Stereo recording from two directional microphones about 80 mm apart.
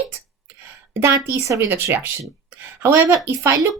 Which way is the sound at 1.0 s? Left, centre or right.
Right.